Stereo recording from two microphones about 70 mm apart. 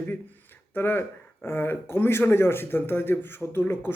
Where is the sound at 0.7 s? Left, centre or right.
Left.